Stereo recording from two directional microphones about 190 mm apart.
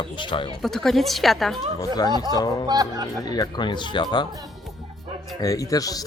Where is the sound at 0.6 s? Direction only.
Centre (ahead or behind).